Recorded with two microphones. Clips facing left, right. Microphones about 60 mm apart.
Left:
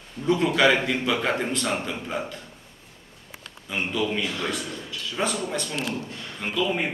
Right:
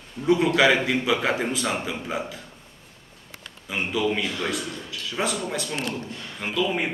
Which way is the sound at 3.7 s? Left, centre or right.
Centre.